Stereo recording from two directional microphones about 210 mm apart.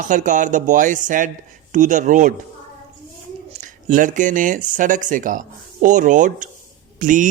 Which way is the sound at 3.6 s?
40° right (ahead or behind).